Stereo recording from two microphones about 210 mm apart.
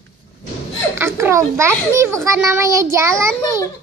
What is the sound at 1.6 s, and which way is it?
A child's voice, 15° right (ahead or behind).